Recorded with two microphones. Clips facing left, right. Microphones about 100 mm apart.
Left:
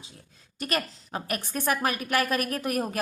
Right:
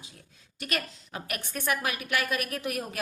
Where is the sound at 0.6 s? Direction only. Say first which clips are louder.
Left 4 dB; 35° left (ahead or behind).